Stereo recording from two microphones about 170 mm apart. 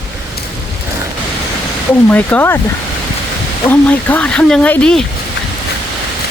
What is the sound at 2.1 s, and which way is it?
Speech, 10° left (ahead or behind).